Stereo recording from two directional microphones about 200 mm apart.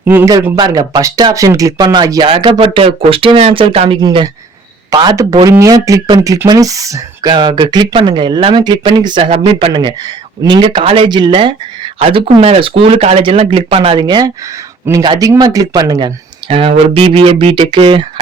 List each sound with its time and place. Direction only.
0.0 s speech: 10° right (ahead or behind); by 18.0 s 25° right (ahead or behind)